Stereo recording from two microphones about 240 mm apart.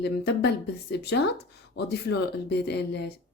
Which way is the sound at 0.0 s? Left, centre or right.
Left.